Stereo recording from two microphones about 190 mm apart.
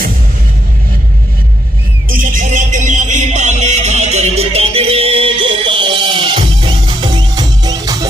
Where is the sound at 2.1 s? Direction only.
45° right (ahead or behind).